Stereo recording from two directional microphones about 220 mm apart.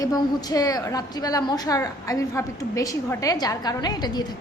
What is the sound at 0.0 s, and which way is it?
A woman's voice, 15° left (ahead or behind).